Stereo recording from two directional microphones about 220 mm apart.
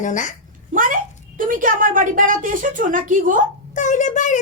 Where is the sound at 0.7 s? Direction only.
35° right (ahead or behind).